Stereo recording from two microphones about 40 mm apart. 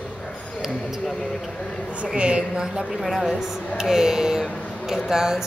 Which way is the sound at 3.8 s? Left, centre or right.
Centre.